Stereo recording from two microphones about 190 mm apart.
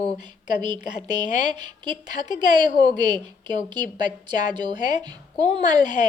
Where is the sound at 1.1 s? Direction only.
25° right (ahead or behind).